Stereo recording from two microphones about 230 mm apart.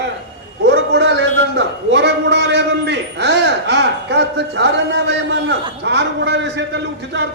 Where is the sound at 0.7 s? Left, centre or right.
Right.